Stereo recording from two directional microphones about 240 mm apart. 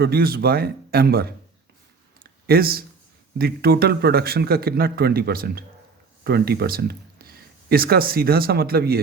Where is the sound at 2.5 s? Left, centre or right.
Right.